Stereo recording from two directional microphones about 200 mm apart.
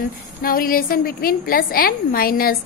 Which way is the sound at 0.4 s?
45° left (ahead or behind).